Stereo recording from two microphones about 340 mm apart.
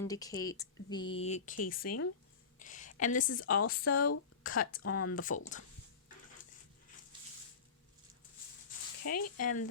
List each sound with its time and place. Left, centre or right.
0.0 s a woman's voice: centre; by 1.9 s left
2.6 s a sound: left
3.0 s a woman's voice: left
4.8 s speech: left
5.1 s a woman's voice: left
9.0 s speech: left